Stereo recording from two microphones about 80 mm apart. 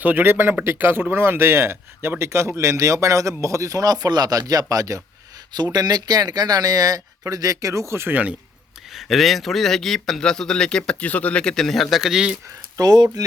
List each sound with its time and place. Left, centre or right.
0.0 s speech: right
5.6 s speech: right
8.1 s speech: centre
8.9 s a man's voice: centre
12.7 s speech: right